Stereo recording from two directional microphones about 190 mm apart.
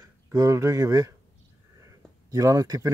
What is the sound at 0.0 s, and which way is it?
Speech, 20° right (ahead or behind).